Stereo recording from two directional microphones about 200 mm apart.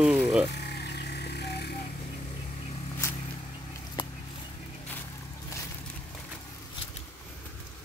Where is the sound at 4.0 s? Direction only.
25° left (ahead or behind).